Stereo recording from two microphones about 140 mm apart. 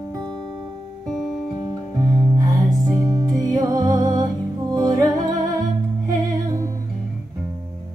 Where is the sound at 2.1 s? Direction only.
30° right (ahead or behind).